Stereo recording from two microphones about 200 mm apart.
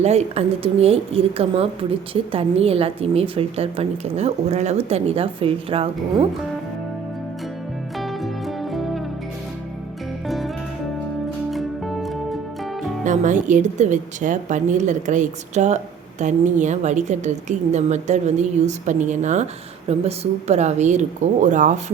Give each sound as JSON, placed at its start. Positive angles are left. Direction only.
{"t": 0.0, "sound": "a woman's voice", "side_deg": -35}
{"t": 7.9, "sound": "music", "side_deg": 0}
{"t": 10.2, "sound": "music", "side_deg": 0}
{"t": 11.5, "sound": "music", "side_deg": 0}
{"t": 13.1, "sound": "a woman's voice", "side_deg": -40}